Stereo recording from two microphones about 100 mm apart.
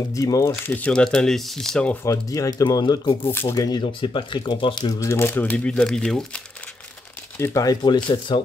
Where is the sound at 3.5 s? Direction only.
40° left (ahead or behind).